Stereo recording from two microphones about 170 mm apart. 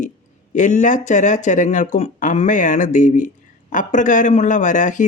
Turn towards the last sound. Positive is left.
turn(degrees=45)  # may be behind; listen again after turning